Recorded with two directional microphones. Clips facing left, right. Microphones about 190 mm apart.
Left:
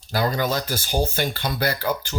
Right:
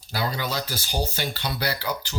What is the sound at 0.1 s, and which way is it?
Speech, 45° left (ahead or behind).